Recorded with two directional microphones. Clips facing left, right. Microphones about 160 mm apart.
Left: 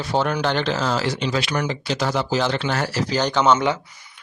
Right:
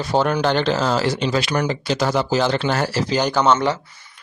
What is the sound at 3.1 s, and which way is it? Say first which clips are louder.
Speech: right 2 dB; 10° right (ahead or behind).